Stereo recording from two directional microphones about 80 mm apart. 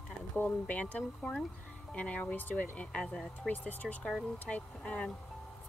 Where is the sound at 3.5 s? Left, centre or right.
Left.